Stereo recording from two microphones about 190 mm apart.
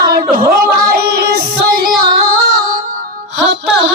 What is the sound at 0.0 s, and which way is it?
Music, 50° right (ahead or behind).